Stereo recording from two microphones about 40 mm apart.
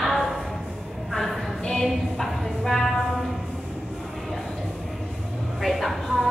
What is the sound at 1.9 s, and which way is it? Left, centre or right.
A woman's voice, centre.